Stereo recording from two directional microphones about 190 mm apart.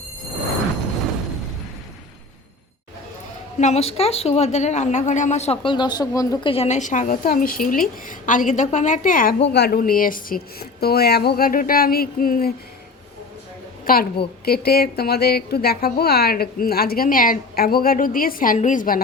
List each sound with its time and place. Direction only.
3.6 s a woman's voice: 35° left (ahead or behind)
9.4 s a woman's voice: 60° left (ahead or behind)
13.8 s a woman's voice: 50° left (ahead or behind)